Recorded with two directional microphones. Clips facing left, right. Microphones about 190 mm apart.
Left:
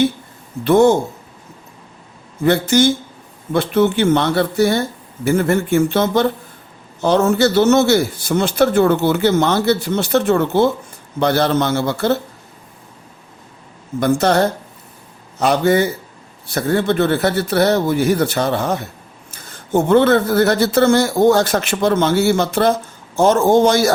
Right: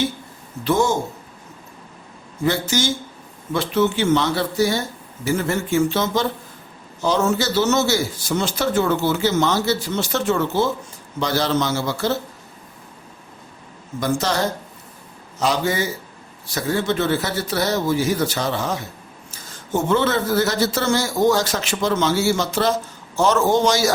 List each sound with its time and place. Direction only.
0.6 s a man's voice: 60° left (ahead or behind)
2.4 s a man's voice: 55° left (ahead or behind)
14.0 s a man's voice: 60° left (ahead or behind)